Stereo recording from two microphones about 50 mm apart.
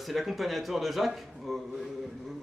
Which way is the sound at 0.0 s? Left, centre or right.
Centre.